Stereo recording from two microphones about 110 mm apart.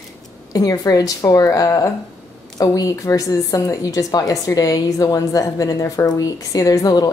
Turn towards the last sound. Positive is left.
turn(degrees=35)  # may be behind; listen again after turning